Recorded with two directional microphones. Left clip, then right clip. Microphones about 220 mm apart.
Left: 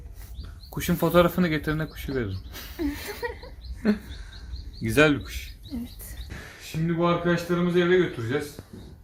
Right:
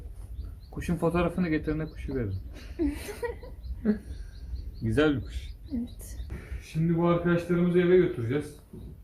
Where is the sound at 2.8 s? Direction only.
Centre (ahead or behind).